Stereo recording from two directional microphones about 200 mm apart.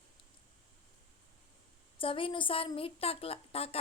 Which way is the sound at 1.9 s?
25° left (ahead or behind).